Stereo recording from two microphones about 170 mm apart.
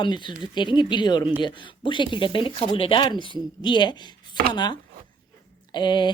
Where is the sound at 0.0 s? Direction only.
25° left (ahead or behind).